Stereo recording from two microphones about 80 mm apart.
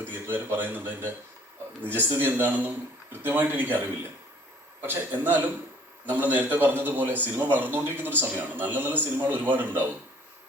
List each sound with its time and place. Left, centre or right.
0.1 s a man's voice: right
4.8 s a man's voice: right